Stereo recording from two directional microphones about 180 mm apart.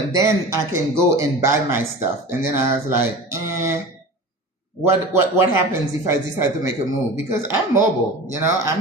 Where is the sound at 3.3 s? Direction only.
15° right (ahead or behind).